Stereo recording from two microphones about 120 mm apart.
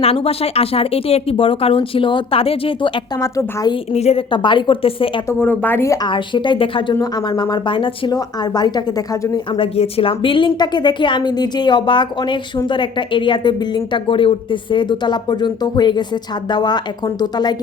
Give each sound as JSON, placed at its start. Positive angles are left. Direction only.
{"t": 0.0, "sound": "speech", "side_deg": 55}
{"t": 3.2, "sound": "a woman's voice", "side_deg": 30}
{"t": 3.9, "sound": "a woman's voice", "side_deg": 60}
{"t": 4.3, "sound": "speech", "side_deg": 40}
{"t": 5.3, "sound": "speech", "side_deg": 15}
{"t": 6.1, "sound": "speech", "side_deg": 45}
{"t": 6.9, "sound": "a woman's voice", "side_deg": 35}
{"t": 9.5, "sound": "a woman's voice", "side_deg": 50}